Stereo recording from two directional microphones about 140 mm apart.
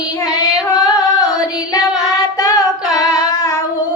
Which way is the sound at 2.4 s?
25° left (ahead or behind).